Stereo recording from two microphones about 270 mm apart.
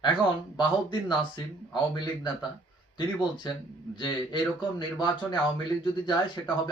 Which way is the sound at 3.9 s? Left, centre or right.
Centre.